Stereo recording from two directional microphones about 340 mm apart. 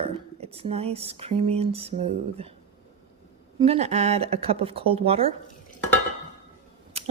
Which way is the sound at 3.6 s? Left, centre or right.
Centre.